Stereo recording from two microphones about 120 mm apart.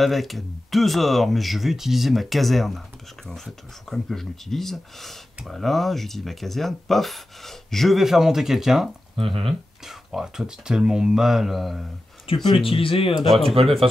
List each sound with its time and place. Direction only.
0.0 s speech: centre (ahead or behind)
9.1 s speech: 50° right (ahead or behind)
9.5 s speech: centre (ahead or behind)
12.4 s speech: 50° left (ahead or behind)
13.3 s speech: centre (ahead or behind)